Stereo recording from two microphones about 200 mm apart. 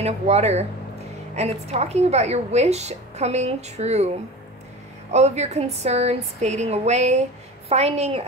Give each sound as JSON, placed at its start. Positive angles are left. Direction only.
{"t": 0.0, "sound": "a woman's voice", "side_deg": -35}
{"t": 5.1, "sound": "a woman's voice", "side_deg": -35}